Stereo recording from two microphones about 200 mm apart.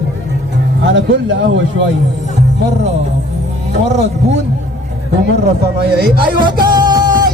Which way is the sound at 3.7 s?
60° right (ahead or behind).